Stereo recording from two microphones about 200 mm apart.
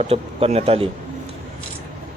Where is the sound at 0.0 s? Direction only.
30° right (ahead or behind).